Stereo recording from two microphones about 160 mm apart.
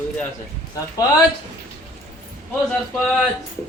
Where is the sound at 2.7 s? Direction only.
Centre (ahead or behind).